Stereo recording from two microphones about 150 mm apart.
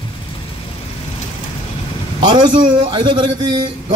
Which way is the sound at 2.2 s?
30° right (ahead or behind).